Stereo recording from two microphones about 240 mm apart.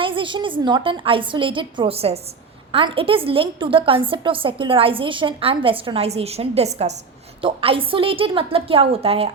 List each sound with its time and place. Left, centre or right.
0.0 s a woman's voice: right